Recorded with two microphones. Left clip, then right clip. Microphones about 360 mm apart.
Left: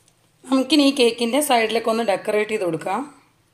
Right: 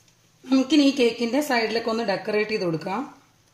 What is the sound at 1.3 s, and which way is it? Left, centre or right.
A woman's voice, left.